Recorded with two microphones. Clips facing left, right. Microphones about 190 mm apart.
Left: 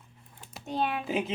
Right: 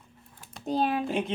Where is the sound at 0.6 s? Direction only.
35° right (ahead or behind).